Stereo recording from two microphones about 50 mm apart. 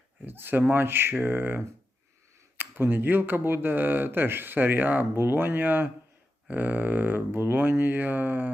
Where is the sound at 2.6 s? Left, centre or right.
Right.